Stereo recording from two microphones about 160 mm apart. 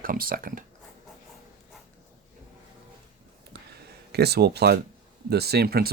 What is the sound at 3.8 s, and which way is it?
Speech, 90° right.